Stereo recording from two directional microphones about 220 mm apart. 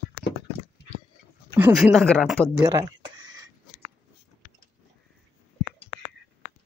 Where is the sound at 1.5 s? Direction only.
15° right (ahead or behind).